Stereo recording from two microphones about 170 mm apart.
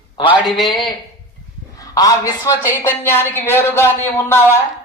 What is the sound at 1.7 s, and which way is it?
A man's voice, 20° left (ahead or behind).